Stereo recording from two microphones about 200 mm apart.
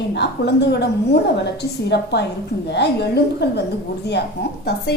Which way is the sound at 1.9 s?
55° left (ahead or behind).